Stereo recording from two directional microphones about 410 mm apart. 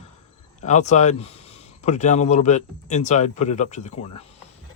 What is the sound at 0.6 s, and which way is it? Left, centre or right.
Speech, centre.